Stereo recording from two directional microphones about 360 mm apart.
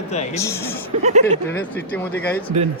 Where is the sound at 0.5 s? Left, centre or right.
Centre.